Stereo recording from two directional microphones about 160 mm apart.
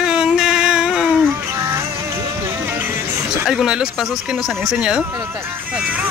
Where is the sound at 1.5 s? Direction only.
15° right (ahead or behind).